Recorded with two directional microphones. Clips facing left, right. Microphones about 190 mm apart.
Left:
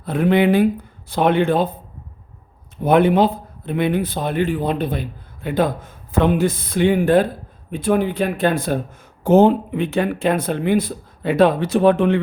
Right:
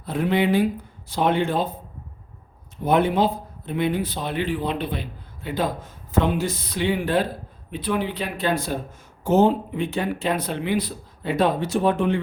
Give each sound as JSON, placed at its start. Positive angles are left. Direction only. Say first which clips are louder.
{"t": 0.0, "sound": "speech", "louder": "left 5 dB", "side_deg": 55}
{"t": 2.8, "sound": "a man's voice", "louder": "left 5 dB", "side_deg": 55}